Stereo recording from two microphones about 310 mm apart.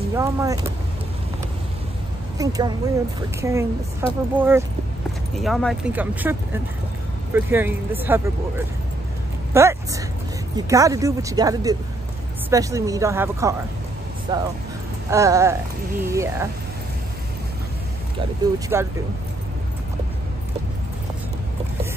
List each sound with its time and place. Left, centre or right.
0.1 s speech: centre
2.3 s speech: centre
7.3 s speech: centre
18.7 s speech: centre